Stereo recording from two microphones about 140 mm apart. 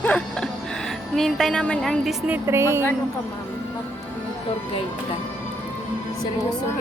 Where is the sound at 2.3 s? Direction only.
20° right (ahead or behind).